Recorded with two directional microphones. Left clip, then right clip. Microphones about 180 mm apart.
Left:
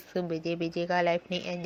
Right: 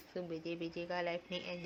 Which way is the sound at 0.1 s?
35° left (ahead or behind).